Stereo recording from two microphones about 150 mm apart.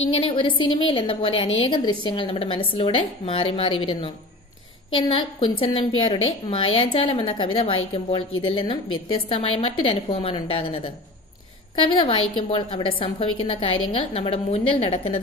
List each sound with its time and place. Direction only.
0.1 s a woman's voice: 35° left (ahead or behind)